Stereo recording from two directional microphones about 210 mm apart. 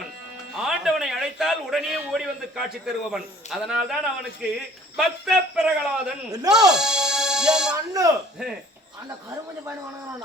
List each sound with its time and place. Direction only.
0.5 s a man's voice: centre (ahead or behind)
7.7 s speech: 15° right (ahead or behind)